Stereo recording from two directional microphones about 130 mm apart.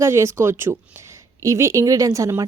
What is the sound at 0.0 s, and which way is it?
A woman's voice, 20° right (ahead or behind).